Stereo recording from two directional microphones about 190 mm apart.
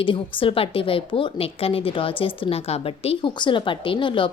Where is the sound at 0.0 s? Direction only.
25° left (ahead or behind).